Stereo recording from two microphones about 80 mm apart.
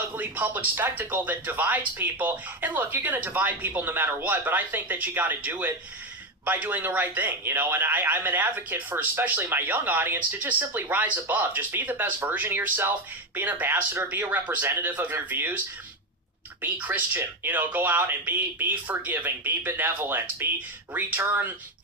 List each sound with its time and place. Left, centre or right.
0.2 s a man's voice: right
16.7 s a man's voice: right